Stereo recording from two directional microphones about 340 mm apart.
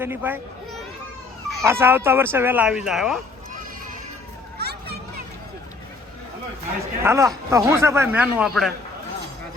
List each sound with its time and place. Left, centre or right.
0.0 s speech: centre
4.5 s a sound: right
7.0 s speech: centre